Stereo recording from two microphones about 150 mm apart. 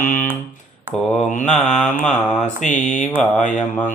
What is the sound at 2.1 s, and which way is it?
Mantra, 55° left (ahead or behind).